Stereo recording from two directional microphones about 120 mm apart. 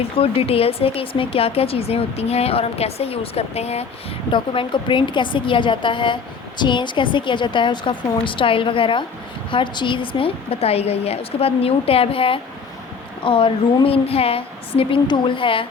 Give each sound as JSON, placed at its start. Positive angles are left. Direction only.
{"t": 0.0, "sound": "speech", "side_deg": 55}
{"t": 4.3, "sound": "a woman's voice", "side_deg": 40}